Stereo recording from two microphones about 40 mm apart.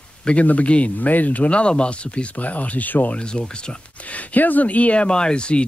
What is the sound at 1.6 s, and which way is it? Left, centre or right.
Speech, left.